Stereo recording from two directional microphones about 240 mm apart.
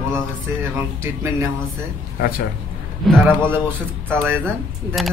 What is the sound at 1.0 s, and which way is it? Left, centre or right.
Speech, centre.